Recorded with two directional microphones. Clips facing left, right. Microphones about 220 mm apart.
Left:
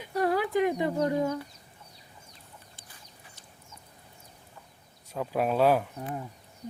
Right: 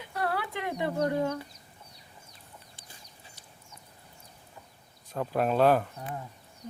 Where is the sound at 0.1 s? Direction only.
15° left (ahead or behind).